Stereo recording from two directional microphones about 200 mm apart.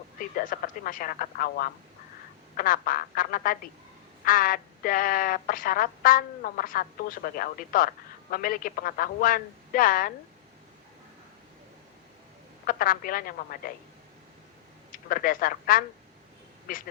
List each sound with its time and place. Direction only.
0.2 s speech: 45° left (ahead or behind)
12.6 s speech: 45° left (ahead or behind)
14.9 s speech: 45° left (ahead or behind)